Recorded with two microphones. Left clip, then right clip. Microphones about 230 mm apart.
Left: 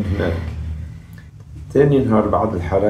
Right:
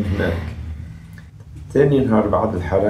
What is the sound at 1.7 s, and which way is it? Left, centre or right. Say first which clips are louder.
Speech: left 1 dB; centre.